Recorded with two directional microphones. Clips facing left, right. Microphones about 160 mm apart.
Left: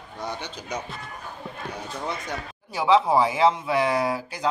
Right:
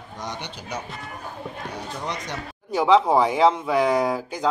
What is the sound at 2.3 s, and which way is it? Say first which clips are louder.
A man's voice: right 3 dB; 5° left (ahead or behind).